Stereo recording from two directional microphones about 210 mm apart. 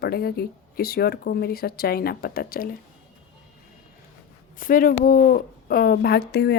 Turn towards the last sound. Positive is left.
turn(degrees=50)  # may be behind; listen again after turning